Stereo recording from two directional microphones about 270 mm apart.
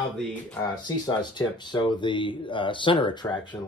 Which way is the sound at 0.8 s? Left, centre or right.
Centre.